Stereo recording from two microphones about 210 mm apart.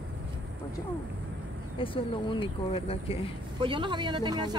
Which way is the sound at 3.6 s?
25° right (ahead or behind).